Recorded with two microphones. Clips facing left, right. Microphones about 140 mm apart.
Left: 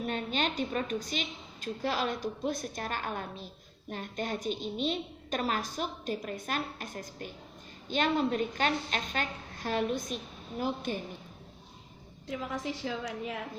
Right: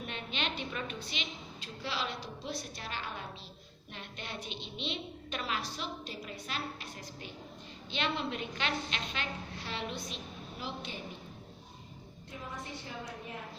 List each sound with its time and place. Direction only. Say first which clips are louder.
0.0 s a woman's voice: left 7 dB; 40° left (ahead or behind)
12.3 s a woman's voice: left 8 dB; 90° left